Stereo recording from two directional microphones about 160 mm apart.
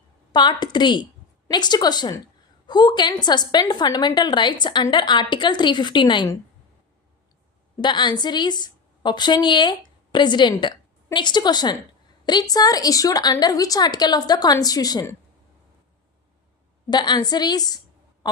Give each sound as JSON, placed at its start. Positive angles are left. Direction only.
{"t": 0.3, "sound": "a woman's voice", "side_deg": 25}
{"t": 7.8, "sound": "a woman's voice", "side_deg": 30}
{"t": 16.9, "sound": "a woman's voice", "side_deg": 25}